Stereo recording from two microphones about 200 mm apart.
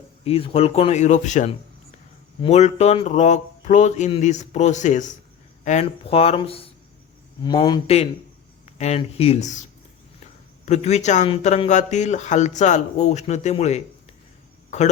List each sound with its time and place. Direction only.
0.3 s speech: 30° left (ahead or behind)
10.7 s speech: 35° left (ahead or behind)